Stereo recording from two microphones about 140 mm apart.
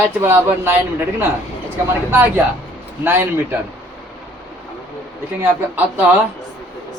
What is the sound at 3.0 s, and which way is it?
Speech, 15° right (ahead or behind).